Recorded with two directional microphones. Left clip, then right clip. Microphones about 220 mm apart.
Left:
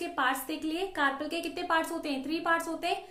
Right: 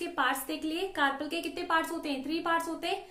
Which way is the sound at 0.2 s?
5° left (ahead or behind).